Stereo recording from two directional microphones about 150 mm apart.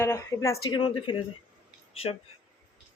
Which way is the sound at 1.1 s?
30° left (ahead or behind).